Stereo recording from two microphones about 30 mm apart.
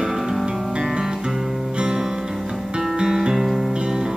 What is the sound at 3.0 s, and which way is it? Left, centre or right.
Music, right.